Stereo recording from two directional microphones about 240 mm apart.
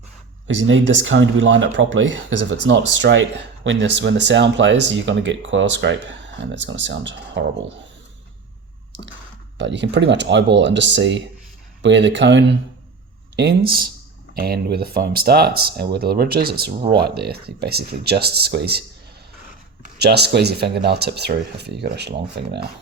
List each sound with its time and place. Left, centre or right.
0.4 s speech: right
9.6 s speech: right
20.0 s speech: right